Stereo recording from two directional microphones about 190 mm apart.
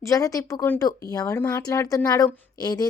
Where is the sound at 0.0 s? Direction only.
15° left (ahead or behind).